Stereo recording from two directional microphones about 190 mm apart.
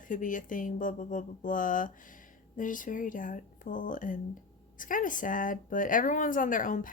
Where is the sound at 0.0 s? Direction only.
45° left (ahead or behind).